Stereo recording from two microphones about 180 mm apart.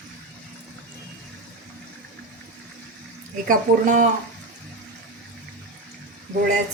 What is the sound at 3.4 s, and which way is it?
Speech, 50° right (ahead or behind).